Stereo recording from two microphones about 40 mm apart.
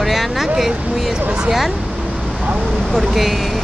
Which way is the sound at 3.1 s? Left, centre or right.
Centre.